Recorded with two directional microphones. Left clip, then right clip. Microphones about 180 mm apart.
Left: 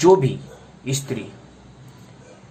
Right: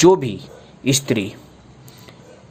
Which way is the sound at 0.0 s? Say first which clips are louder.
Right 1 dB; 60° right (ahead or behind).